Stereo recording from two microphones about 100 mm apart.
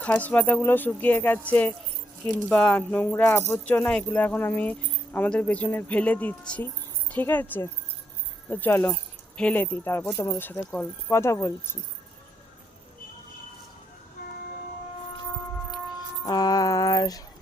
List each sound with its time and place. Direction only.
0.0 s speech: 15° left (ahead or behind)
8.4 s speech: 20° left (ahead or behind)
16.2 s music: 40° left (ahead or behind)